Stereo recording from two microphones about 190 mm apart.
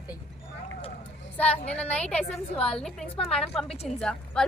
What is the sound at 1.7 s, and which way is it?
A woman's voice, 5° left (ahead or behind).